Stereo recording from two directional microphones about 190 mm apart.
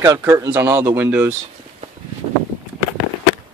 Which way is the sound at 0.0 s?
15° right (ahead or behind).